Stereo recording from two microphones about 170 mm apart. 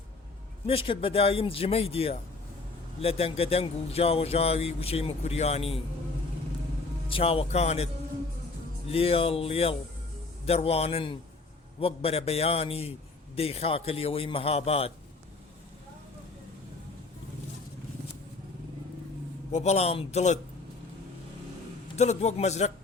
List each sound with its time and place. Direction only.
0.7 s speech: 35° left (ahead or behind)
7.1 s speech: 35° left (ahead or behind)
8.9 s speech: 35° left (ahead or behind)
19.5 s speech: 40° left (ahead or behind)
21.9 s speech: 40° left (ahead or behind)